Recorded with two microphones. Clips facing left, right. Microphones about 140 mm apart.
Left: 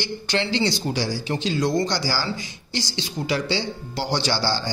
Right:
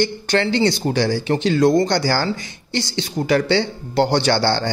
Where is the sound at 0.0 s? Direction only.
50° right (ahead or behind).